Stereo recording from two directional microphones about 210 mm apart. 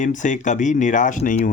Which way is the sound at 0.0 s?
35° left (ahead or behind).